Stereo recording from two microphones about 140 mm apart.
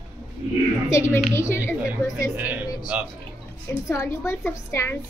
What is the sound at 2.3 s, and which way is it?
Speech, 10° right (ahead or behind).